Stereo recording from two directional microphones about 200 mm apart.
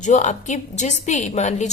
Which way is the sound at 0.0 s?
35° left (ahead or behind).